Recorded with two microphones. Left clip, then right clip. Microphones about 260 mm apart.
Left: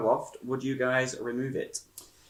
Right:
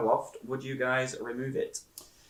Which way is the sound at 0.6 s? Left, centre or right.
Left.